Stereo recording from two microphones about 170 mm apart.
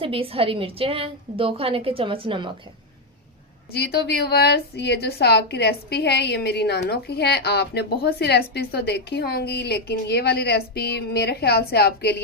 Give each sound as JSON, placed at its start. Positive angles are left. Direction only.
{"t": 0.0, "sound": "a woman's voice", "side_deg": -35}
{"t": 3.7, "sound": "a woman's voice", "side_deg": 75}